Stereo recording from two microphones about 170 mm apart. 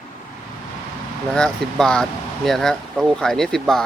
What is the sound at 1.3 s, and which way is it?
Speech, 5° left (ahead or behind).